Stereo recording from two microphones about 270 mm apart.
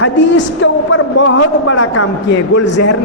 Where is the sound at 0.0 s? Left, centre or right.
Left.